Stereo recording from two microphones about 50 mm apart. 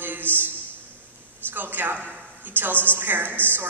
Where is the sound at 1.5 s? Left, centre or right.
Right.